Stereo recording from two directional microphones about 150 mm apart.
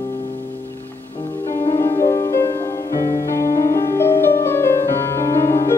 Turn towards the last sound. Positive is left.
turn(degrees=15)  # may be behind; listen again after turning